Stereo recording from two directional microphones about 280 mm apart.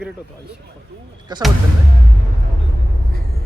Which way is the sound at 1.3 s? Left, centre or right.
Centre.